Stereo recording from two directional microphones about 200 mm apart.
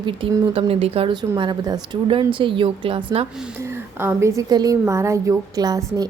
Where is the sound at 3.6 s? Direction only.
10° right (ahead or behind).